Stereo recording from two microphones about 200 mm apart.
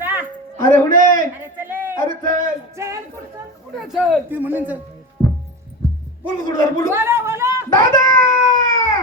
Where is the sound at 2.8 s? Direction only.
15° right (ahead or behind).